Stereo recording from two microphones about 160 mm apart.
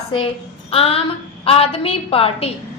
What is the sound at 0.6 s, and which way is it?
Child singing, 35° left (ahead or behind).